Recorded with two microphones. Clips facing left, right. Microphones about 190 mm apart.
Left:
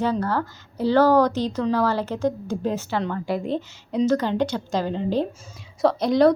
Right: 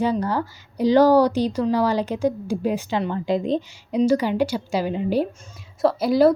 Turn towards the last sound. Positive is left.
turn(degrees=-5)  # may be behind; listen again after turning